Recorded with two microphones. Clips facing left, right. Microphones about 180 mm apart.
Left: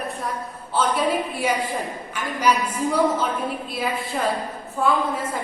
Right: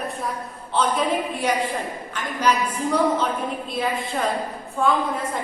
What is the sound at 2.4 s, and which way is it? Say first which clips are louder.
Speech: left 1 dB; 10° left (ahead or behind).